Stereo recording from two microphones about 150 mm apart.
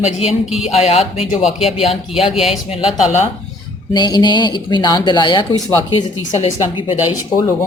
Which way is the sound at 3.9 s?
30° left (ahead or behind).